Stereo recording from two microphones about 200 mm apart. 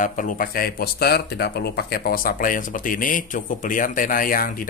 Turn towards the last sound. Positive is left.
turn(degrees=45)  # may be behind; listen again after turning